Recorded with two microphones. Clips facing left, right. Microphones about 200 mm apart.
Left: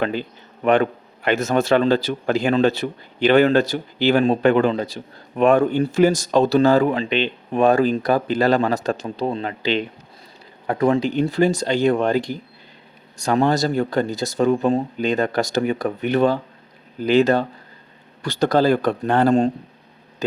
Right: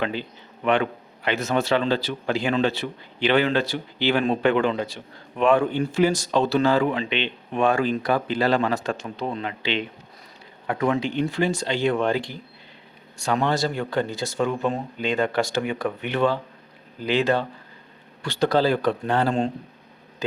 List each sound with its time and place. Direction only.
0.0 s a man's voice: 45° left (ahead or behind)